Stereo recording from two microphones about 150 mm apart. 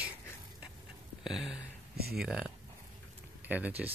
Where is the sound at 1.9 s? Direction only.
90° right.